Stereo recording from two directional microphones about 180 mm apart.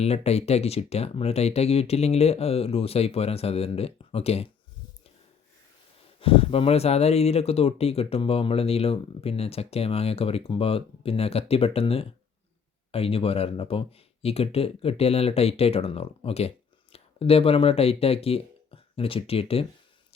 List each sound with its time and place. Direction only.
0.0 s speech: 35° left (ahead or behind)
6.1 s speech: 30° left (ahead or behind)